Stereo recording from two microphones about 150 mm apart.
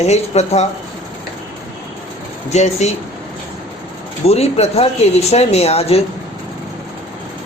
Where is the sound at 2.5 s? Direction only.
50° left (ahead or behind).